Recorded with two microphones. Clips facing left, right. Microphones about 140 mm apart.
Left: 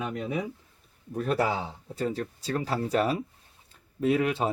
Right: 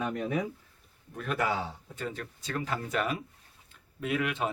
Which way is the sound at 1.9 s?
35° left (ahead or behind).